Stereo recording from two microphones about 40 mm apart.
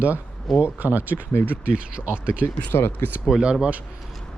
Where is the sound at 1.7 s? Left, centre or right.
Right.